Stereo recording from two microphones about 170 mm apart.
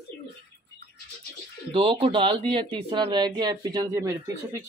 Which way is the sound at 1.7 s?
30° right (ahead or behind).